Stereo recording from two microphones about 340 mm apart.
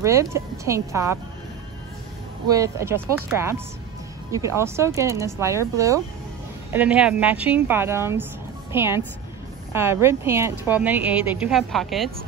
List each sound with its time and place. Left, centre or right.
0.0 s speech: centre
2.4 s a woman's voice: centre